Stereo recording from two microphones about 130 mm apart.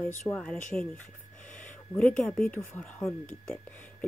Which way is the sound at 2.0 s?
5° left (ahead or behind).